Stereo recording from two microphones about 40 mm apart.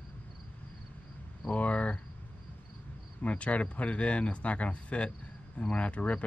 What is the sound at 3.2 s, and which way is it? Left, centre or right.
Speech, left.